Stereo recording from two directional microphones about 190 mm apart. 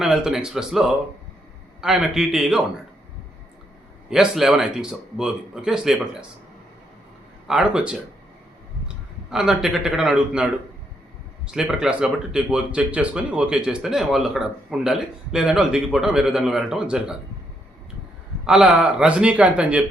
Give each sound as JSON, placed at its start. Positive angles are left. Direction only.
{"t": 0.0, "sound": "speech", "side_deg": 0}
{"t": 4.1, "sound": "speech", "side_deg": 0}
{"t": 7.4, "sound": "speech", "side_deg": -5}
{"t": 9.3, "sound": "speech", "side_deg": 0}
{"t": 11.5, "sound": "speech", "side_deg": -5}
{"t": 18.4, "sound": "speech", "side_deg": -5}